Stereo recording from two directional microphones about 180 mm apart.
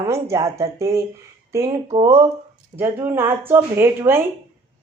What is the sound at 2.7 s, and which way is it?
Speech, 15° right (ahead or behind).